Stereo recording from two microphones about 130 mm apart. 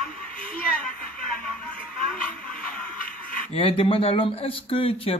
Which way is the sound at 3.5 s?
45° left (ahead or behind).